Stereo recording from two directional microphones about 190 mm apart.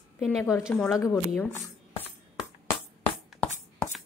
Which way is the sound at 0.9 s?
15° left (ahead or behind).